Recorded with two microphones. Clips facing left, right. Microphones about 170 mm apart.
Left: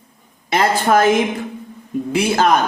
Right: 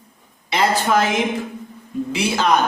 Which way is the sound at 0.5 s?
50° left (ahead or behind).